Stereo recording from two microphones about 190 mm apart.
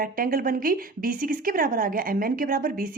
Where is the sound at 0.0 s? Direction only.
50° right (ahead or behind).